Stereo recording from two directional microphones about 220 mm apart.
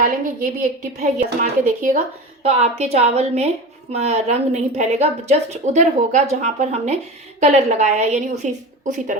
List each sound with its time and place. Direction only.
0.8 s a woman's voice: 35° right (ahead or behind)